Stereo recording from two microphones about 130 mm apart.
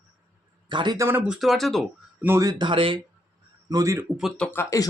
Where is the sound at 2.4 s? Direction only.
40° right (ahead or behind).